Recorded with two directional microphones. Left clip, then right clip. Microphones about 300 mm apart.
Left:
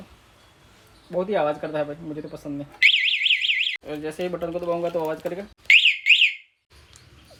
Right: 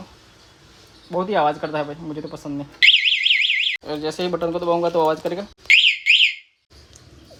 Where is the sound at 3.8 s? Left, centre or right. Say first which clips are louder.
Right 5 dB; centre.